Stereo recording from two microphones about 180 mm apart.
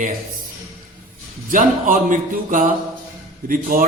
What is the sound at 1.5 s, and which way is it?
A man's voice, 45° right (ahead or behind).